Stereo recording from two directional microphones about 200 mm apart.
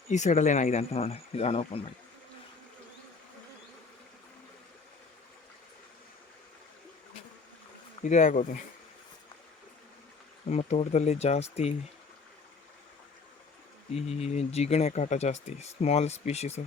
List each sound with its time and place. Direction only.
0.1 s speech: 35° left (ahead or behind)
8.0 s speech: 40° left (ahead or behind)
10.5 s speech: 35° left (ahead or behind)
13.9 s speech: 30° left (ahead or behind)